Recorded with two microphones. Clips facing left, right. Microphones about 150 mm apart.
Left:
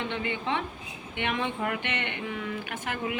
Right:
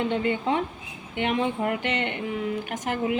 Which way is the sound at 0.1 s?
45° right (ahead or behind).